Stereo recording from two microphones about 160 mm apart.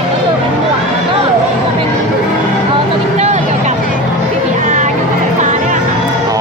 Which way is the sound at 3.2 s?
45° right (ahead or behind).